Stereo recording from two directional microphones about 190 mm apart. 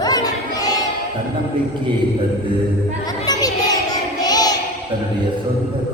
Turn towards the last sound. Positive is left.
turn(degrees=20)  # may be behind; listen again after turning